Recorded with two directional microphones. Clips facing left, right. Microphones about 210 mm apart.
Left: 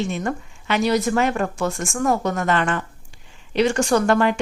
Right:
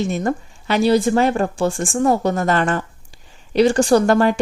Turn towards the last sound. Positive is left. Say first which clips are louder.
# right 4 dB
turn(degrees=-35)  # may be behind; listen again after turning